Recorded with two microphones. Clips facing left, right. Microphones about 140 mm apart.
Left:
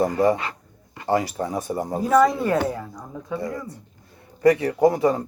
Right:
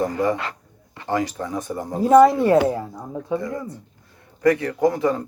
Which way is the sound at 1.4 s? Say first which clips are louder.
Left 2 dB; 25° left (ahead or behind).